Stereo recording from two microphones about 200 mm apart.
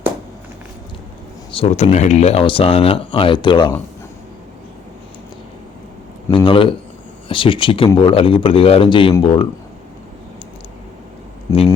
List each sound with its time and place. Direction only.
1.5 s speech: 30° left (ahead or behind)
6.3 s speech: 25° left (ahead or behind)
11.5 s speech: 15° left (ahead or behind)